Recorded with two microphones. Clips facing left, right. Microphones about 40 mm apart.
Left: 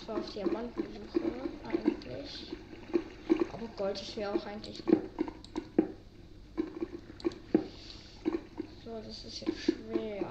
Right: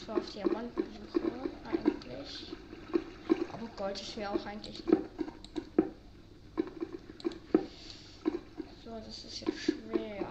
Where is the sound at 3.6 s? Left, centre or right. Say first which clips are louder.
Left 3 dB; centre.